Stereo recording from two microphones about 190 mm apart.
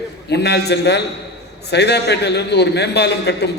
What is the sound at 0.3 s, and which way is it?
A man's voice, 60° left (ahead or behind).